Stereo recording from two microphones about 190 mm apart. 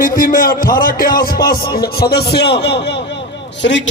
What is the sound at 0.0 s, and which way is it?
A man's voice, 45° left (ahead or behind).